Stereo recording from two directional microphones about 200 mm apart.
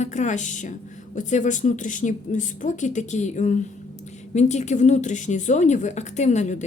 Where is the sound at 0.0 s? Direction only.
35° left (ahead or behind).